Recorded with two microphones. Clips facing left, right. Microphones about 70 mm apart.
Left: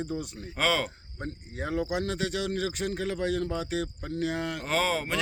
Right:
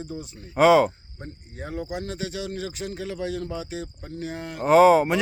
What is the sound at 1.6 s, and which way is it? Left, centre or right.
A man's voice, left.